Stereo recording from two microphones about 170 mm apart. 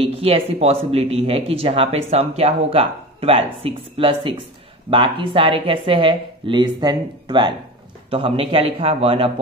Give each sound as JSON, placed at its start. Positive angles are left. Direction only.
{"t": 0.0, "sound": "speech", "side_deg": -35}